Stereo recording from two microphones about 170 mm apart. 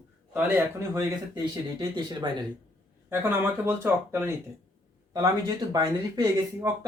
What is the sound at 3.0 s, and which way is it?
Speech, 15° right (ahead or behind).